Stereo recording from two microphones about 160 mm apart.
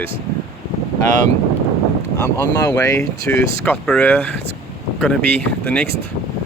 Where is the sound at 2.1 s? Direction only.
15° left (ahead or behind).